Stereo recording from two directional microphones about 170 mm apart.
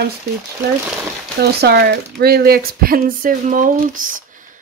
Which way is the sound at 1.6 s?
70° right (ahead or behind).